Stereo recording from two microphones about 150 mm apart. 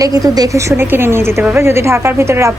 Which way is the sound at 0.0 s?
25° right (ahead or behind).